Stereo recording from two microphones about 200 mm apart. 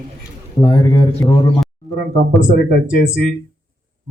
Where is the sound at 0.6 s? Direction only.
20° left (ahead or behind).